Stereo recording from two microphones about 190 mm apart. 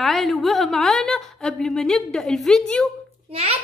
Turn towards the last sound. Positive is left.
turn(degrees=-30)  # may be behind; listen again after turning